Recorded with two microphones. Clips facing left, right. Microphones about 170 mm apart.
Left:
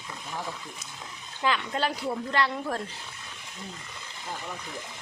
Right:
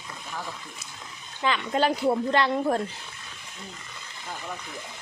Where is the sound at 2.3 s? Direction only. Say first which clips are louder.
Right 5 dB; 25° right (ahead or behind).